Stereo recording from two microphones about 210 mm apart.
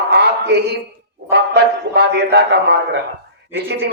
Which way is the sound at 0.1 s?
55° right (ahead or behind).